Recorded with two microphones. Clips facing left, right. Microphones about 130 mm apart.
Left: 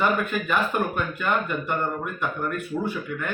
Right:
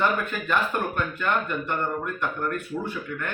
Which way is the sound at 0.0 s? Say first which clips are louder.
Left 2 dB; 10° left (ahead or behind).